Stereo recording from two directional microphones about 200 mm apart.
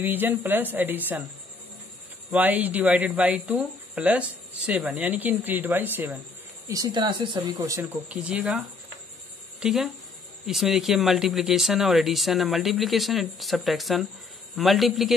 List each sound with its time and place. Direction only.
0.0 s speech: 10° right (ahead or behind)
2.3 s speech: 10° right (ahead or behind)
8.1 s speech: 5° right (ahead or behind)